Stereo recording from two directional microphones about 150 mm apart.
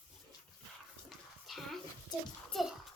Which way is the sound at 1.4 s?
Centre (ahead or behind).